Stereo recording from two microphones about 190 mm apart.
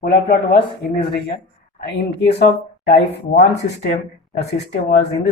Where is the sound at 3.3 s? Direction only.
65° left (ahead or behind).